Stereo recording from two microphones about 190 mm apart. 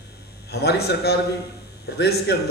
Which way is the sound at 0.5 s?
60° left (ahead or behind).